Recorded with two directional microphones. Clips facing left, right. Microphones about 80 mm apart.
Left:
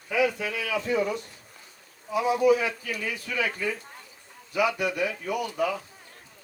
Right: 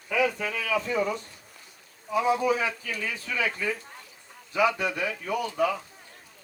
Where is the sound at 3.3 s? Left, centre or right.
Left.